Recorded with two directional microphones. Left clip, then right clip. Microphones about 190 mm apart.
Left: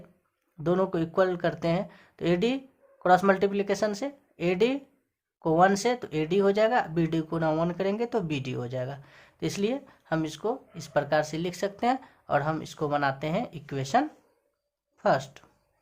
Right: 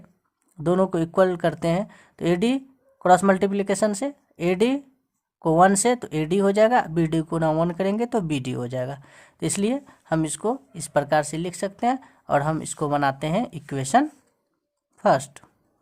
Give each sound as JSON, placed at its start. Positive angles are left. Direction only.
{"t": 0.6, "sound": "speech", "side_deg": -35}